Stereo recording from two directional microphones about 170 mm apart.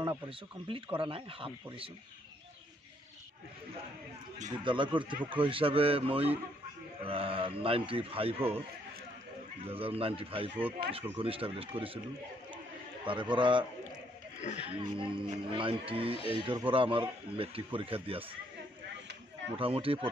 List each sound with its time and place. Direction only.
0.7 s a man's voice: 30° right (ahead or behind)
4.5 s a man's voice: 30° right (ahead or behind)
9.7 s a man's voice: 35° right (ahead or behind)
10.8 s speech: 60° right (ahead or behind)
11.1 s a man's voice: 30° right (ahead or behind)
13.0 s speech: 30° right (ahead or behind)
14.4 s speech: 40° left (ahead or behind)
14.7 s a man's voice: 30° right (ahead or behind)
19.5 s a man's voice: 35° right (ahead or behind)